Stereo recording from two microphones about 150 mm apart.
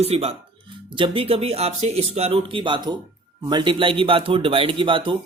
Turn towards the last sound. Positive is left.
turn(degrees=-35)  # may be behind; listen again after turning